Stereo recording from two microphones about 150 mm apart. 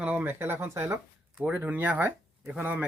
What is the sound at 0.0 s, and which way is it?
Speech, 10° right (ahead or behind).